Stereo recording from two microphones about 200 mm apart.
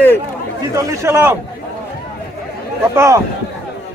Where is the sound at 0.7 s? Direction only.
15° right (ahead or behind).